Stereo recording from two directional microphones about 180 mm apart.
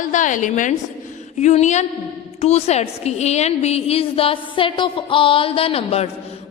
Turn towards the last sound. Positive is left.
turn(degrees=35)  # may be behind; listen again after turning